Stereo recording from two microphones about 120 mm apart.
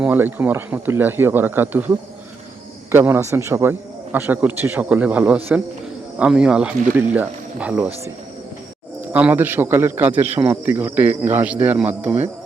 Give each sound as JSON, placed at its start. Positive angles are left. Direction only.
{"t": 0.0, "sound": "a man's voice", "side_deg": -15}
{"t": 2.9, "sound": "a man's voice", "side_deg": -20}
{"t": 9.0, "sound": "a man's voice", "side_deg": -15}